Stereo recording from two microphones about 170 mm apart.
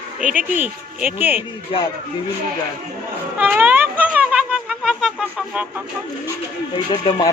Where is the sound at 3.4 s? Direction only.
10° right (ahead or behind).